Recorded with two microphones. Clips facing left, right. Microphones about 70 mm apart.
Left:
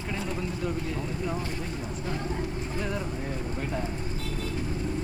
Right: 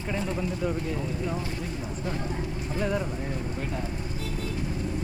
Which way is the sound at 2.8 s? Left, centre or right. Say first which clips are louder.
Right 5 dB; centre.